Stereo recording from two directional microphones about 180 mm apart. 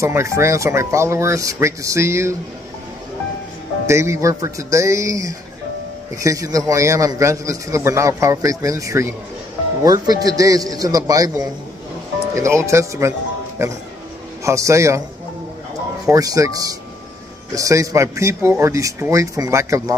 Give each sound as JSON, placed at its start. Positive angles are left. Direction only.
{"t": 0.0, "sound": "a man's voice", "side_deg": -15}
{"t": 3.8, "sound": "a man's voice", "side_deg": -15}
{"t": 14.4, "sound": "a man's voice", "side_deg": -15}
{"t": 16.1, "sound": "a man's voice", "side_deg": -20}
{"t": 17.6, "sound": "a man's voice", "side_deg": -15}